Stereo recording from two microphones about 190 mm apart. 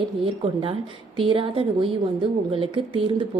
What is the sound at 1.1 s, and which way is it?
A woman's voice, 30° right (ahead or behind).